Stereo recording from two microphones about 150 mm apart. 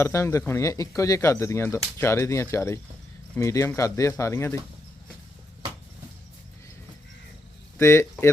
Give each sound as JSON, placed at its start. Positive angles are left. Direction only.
{"t": 0.0, "sound": "speech", "side_deg": 20}
{"t": 7.8, "sound": "speech", "side_deg": 20}